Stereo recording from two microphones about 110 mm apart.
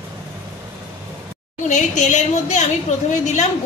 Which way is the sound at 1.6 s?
90° left.